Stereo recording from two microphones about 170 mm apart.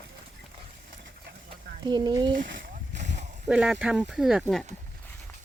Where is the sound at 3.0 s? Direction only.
45° right (ahead or behind).